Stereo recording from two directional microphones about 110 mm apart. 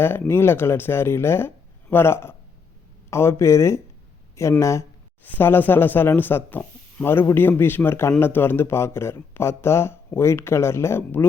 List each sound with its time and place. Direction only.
0.0 s speech: 20° left (ahead or behind)